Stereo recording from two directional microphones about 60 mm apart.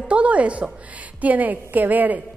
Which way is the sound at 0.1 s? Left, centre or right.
Right.